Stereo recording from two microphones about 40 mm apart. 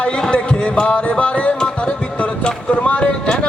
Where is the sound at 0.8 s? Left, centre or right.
Left.